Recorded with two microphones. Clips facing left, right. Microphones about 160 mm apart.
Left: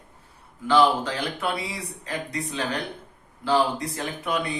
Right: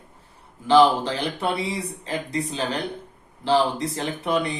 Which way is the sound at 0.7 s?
25° right (ahead or behind).